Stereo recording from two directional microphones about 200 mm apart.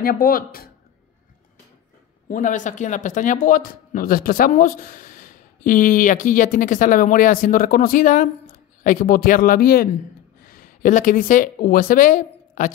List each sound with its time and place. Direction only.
0.0 s speech: 45° left (ahead or behind)
2.2 s speech: 40° left (ahead or behind)